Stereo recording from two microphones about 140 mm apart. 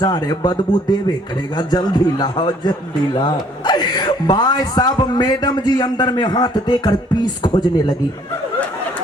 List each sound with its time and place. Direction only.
0.0 s speech: 30° left (ahead or behind)